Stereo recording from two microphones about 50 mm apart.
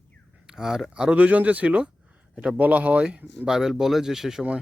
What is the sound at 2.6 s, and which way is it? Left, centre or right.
Speech, right.